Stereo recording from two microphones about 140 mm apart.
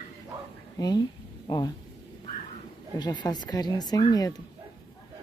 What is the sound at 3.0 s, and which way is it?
A woman's voice, 30° left (ahead or behind).